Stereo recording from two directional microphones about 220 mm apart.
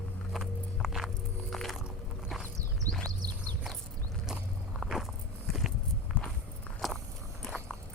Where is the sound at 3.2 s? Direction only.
20° right (ahead or behind).